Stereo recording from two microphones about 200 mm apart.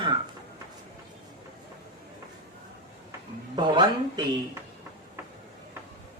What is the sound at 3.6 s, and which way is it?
Speech, 20° right (ahead or behind).